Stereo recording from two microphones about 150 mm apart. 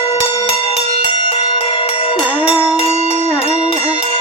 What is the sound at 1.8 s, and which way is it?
Music, 40° left (ahead or behind).